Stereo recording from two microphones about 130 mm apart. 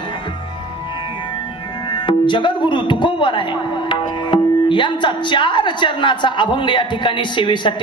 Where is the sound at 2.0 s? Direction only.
35° left (ahead or behind).